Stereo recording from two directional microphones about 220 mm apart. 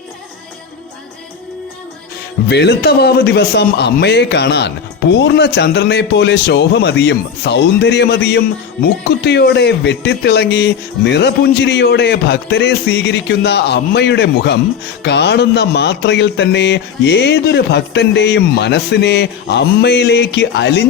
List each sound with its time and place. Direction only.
2.5 s a man's voice: 50° left (ahead or behind)